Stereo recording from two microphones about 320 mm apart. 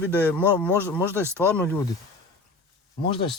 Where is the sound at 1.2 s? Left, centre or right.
Centre.